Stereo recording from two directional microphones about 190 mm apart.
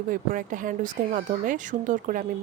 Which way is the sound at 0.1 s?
45° right (ahead or behind).